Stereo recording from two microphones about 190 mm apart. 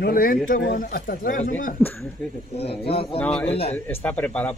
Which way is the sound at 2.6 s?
30° left (ahead or behind).